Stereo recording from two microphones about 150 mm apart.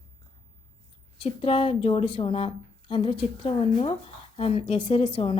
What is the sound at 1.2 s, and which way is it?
A woman's voice, 40° left (ahead or behind).